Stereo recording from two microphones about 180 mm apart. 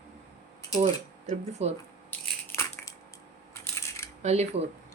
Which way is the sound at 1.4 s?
35° right (ahead or behind).